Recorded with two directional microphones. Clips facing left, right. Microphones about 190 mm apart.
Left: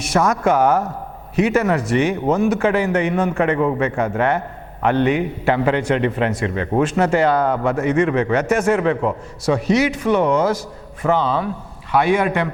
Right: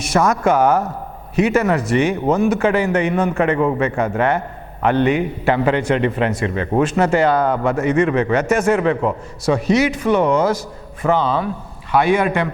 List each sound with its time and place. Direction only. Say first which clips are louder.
0.0 s a man's voice: right 1 dB; 10° right (ahead or behind)